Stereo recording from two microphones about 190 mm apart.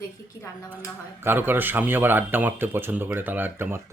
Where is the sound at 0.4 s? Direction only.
20° left (ahead or behind).